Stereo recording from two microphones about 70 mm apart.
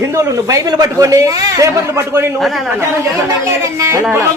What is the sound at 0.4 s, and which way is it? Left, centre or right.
A man's voice, right.